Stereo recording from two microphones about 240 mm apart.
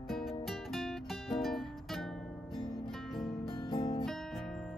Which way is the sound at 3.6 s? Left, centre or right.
Left.